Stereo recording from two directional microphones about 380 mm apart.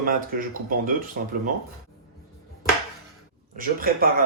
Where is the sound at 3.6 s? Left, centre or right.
Right.